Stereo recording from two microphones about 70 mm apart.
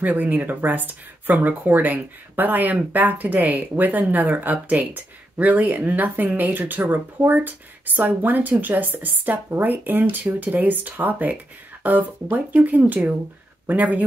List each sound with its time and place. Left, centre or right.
0.0 s speech: right